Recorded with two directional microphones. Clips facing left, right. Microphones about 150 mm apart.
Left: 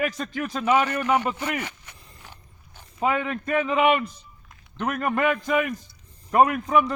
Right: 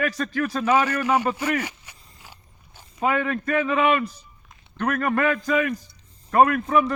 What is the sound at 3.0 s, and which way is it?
A man's voice, 20° left (ahead or behind).